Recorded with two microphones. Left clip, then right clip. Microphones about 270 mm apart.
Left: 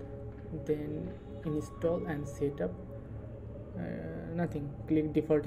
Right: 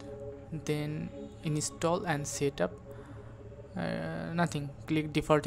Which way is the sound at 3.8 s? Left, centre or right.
Right.